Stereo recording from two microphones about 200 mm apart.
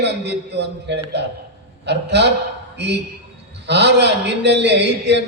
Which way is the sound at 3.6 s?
60° right (ahead or behind).